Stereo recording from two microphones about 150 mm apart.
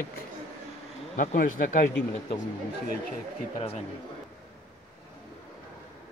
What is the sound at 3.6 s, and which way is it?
Speech, 45° left (ahead or behind).